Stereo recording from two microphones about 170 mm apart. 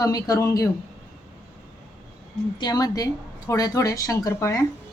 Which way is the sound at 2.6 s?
25° left (ahead or behind).